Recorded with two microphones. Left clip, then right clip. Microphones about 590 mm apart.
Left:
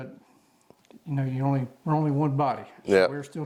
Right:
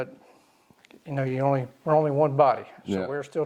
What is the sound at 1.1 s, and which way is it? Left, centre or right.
Speech, right.